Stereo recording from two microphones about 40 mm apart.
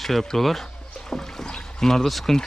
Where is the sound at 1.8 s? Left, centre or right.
Centre.